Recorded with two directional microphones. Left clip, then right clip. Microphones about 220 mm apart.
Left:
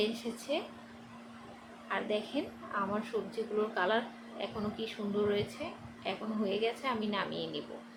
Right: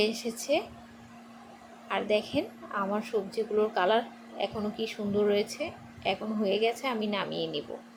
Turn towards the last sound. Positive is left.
turn(degrees=-20)  # may be behind; listen again after turning